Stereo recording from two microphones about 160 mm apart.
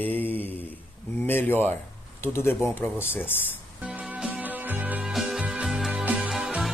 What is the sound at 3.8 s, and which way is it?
Music, 10° right (ahead or behind).